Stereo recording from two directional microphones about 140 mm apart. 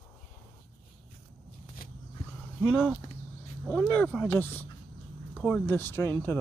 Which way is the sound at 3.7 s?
10° left (ahead or behind).